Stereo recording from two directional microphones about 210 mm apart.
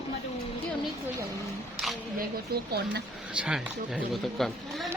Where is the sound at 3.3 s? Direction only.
5° right (ahead or behind).